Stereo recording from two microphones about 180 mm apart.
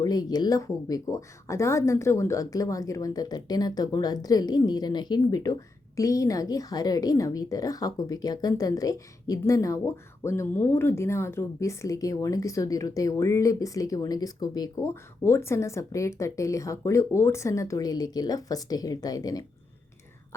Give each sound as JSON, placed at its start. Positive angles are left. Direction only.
{"t": 0.0, "sound": "speech", "side_deg": 20}